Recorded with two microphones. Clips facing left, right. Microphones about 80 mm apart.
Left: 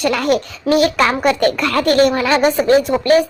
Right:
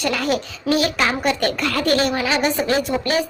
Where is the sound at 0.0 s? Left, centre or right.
Left.